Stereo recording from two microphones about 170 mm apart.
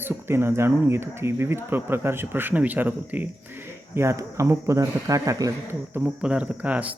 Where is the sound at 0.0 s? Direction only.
15° right (ahead or behind).